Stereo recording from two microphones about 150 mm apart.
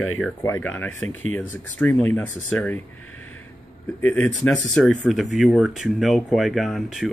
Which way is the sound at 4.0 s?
10° left (ahead or behind).